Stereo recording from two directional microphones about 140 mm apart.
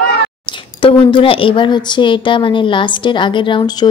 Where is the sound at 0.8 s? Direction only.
40° left (ahead or behind).